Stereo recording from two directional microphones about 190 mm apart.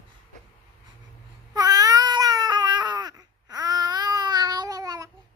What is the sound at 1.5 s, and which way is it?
Cat, 20° right (ahead or behind).